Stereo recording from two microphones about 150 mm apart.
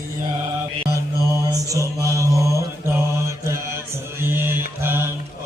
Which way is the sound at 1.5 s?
20° right (ahead or behind).